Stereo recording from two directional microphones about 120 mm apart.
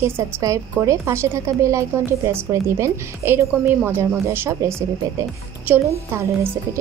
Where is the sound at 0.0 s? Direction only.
25° right (ahead or behind).